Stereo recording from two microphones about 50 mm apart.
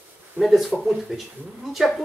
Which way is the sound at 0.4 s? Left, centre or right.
Centre.